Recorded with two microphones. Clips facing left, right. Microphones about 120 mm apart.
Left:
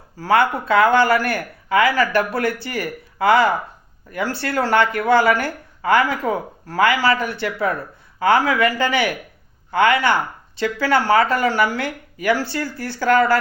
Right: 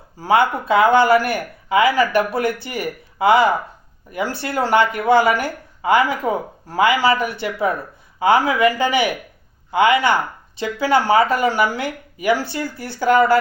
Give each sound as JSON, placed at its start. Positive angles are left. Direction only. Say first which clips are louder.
{"t": 0.2, "sound": "speech", "louder": "right 1 dB", "side_deg": -15}